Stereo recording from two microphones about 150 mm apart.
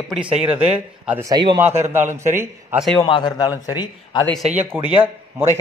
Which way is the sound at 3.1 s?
30° left (ahead or behind).